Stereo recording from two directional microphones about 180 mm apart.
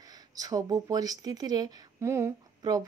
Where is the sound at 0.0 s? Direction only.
20° right (ahead or behind).